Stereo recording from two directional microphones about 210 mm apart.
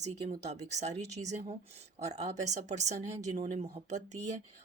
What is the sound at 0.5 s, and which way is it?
Speech, 35° right (ahead or behind).